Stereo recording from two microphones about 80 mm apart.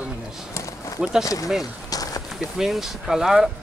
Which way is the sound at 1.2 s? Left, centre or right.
Left.